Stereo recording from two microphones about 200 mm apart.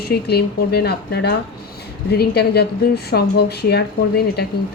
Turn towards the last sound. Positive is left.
turn(degrees=55)  # may be behind; listen again after turning